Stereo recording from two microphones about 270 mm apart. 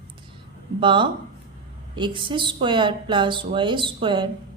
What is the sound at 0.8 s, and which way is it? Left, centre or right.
A woman's voice, centre.